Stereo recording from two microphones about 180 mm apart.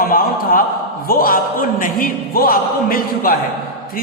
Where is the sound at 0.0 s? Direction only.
50° left (ahead or behind).